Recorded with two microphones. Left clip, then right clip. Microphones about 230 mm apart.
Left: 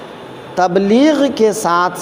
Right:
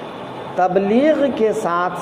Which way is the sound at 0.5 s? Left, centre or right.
Left.